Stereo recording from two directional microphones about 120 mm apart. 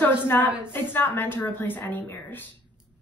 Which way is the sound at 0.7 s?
15° left (ahead or behind).